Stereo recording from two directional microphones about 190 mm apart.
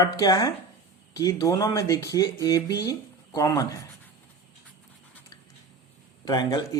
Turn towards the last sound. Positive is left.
turn(degrees=20)  # may be behind; listen again after turning